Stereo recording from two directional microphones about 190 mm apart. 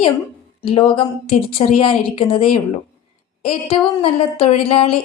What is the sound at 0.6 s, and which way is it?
A woman's voice, 30° left (ahead or behind).